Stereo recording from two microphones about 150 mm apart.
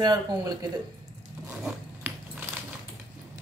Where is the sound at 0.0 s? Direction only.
25° right (ahead or behind).